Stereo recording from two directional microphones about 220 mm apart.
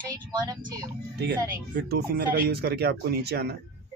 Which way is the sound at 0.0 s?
40° right (ahead or behind).